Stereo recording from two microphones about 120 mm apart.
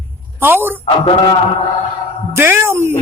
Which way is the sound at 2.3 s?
20° right (ahead or behind).